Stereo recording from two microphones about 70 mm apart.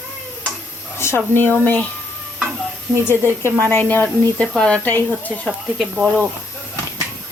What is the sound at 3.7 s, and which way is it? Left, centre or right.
Speech, left.